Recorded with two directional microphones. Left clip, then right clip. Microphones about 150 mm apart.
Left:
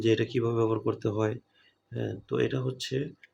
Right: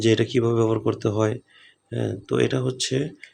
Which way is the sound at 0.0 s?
30° right (ahead or behind).